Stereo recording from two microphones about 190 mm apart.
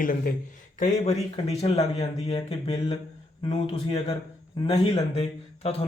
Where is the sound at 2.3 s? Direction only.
30° left (ahead or behind).